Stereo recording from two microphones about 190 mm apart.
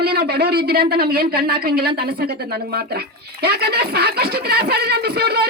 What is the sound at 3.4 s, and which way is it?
Speech, 55° right (ahead or behind).